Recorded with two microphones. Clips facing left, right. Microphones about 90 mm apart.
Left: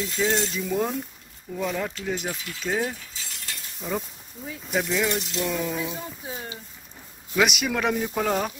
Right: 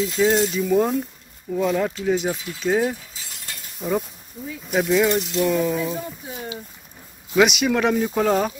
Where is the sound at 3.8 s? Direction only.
5° right (ahead or behind).